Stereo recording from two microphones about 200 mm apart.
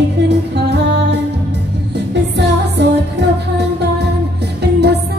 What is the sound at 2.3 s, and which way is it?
Music, 60° right (ahead or behind).